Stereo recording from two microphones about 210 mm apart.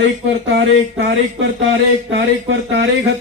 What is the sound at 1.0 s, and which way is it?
A man's voice, 65° right (ahead or behind).